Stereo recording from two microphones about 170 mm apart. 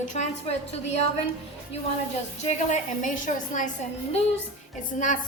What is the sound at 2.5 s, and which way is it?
A woman's voice, 45° left (ahead or behind).